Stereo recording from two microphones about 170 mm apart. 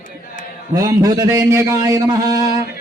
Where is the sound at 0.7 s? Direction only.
20° right (ahead or behind).